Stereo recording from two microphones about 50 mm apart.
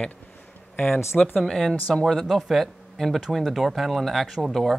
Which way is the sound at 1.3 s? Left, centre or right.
Centre.